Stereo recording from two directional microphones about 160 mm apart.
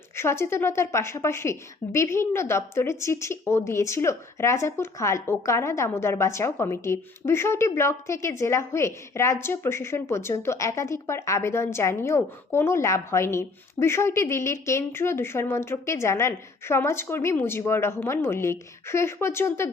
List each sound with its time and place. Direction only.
0.2 s a woman's voice: 15° left (ahead or behind)